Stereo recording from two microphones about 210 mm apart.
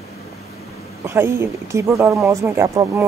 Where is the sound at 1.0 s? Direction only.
10° right (ahead or behind).